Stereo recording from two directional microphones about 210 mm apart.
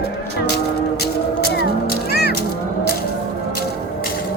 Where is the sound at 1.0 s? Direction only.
50° left (ahead or behind).